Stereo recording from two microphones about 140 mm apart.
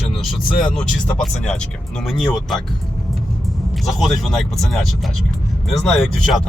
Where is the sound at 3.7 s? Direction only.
Centre (ahead or behind).